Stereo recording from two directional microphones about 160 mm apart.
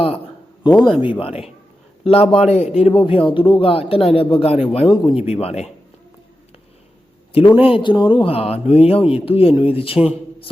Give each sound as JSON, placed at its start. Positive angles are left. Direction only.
{"t": 0.7, "sound": "speech", "side_deg": 5}
{"t": 2.0, "sound": "a man's voice", "side_deg": 35}
{"t": 7.3, "sound": "a man's voice", "side_deg": 35}